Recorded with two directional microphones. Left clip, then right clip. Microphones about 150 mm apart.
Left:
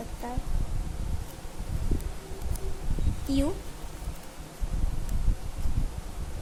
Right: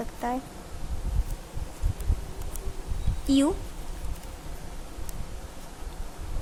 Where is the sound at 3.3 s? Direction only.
35° right (ahead or behind).